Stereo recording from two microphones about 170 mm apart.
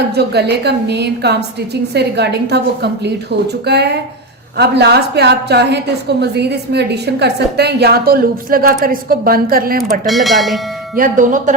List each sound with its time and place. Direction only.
0.1 s a woman's voice: 75° right (ahead or behind); by 10.1 s 60° right (ahead or behind)
10.1 s speech: centre (ahead or behind)
10.9 s speech: 50° right (ahead or behind)